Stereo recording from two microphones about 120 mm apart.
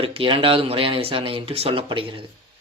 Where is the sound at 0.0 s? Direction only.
50° right (ahead or behind).